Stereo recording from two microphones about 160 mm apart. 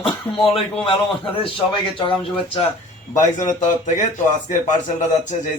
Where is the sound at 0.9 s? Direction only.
35° left (ahead or behind).